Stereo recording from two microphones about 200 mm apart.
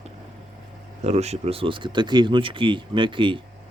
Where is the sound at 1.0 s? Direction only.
35° right (ahead or behind).